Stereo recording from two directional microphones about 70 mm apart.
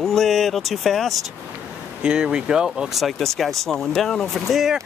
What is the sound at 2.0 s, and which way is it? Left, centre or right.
Speech, centre.